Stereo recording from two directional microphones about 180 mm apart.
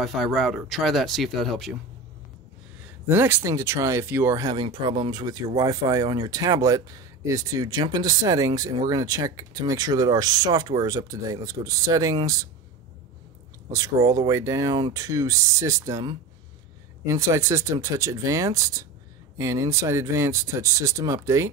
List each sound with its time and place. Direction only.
0.0 s speech: centre (ahead or behind)
2.8 s speech: 10° right (ahead or behind)
13.7 s speech: 20° right (ahead or behind)